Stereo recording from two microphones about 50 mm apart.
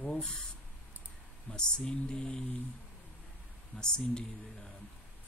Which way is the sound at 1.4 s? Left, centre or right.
Centre.